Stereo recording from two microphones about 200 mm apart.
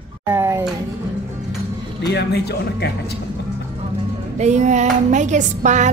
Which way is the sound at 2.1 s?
55° left (ahead or behind).